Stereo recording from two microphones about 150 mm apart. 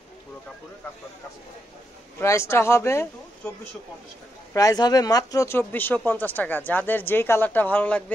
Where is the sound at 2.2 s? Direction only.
20° left (ahead or behind).